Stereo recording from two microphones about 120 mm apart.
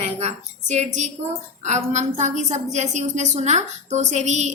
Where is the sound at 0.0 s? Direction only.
60° right (ahead or behind).